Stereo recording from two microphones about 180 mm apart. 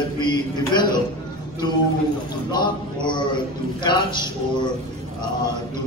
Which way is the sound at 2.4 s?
25° left (ahead or behind).